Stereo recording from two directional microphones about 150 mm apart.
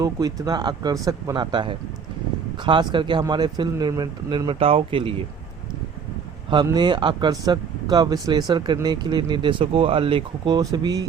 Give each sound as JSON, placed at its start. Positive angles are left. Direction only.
{"t": 0.0, "sound": "speech", "side_deg": -25}
{"t": 6.7, "sound": "speech", "side_deg": -30}